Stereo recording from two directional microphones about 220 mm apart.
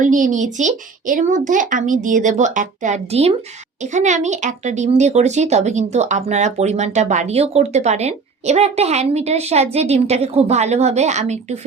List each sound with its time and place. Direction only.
0.0 s speech: 35° right (ahead or behind)